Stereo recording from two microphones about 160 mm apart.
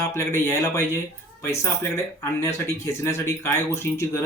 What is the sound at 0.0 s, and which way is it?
Speech, 15° left (ahead or behind).